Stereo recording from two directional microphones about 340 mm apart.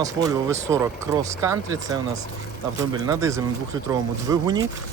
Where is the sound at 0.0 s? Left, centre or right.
Centre.